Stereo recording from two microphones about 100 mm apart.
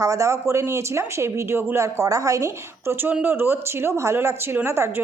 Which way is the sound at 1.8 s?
35° right (ahead or behind).